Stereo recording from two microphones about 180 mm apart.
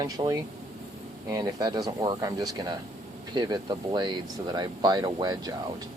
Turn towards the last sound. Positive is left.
turn(degrees=-20)  # may be behind; listen again after turning